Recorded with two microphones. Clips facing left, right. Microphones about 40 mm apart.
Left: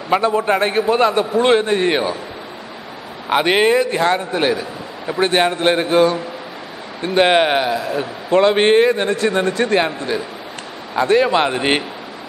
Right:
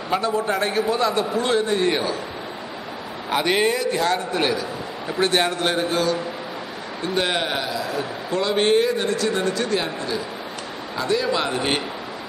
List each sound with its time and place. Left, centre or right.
0.1 s a man's voice: left
3.3 s a man's voice: left